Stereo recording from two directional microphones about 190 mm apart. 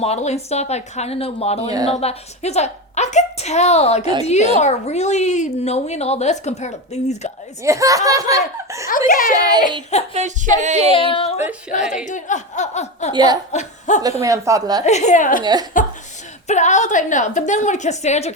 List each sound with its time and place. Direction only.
0.0 s a woman's voice: 35° left (ahead or behind)
7.6 s speech: 15° right (ahead or behind)
9.0 s a child's voice: 45° left (ahead or behind)
9.3 s child singing: 20° right (ahead or behind)
10.2 s music: 40° right (ahead or behind)
10.9 s speech: 30° left (ahead or behind)
11.7 s a woman's voice: 40° left (ahead or behind)
13.1 s child singing: 20° right (ahead or behind)
13.5 s a woman's voice: 40° left (ahead or behind)
14.2 s speech: 15° right (ahead or behind)
14.8 s a woman's voice: 35° left (ahead or behind)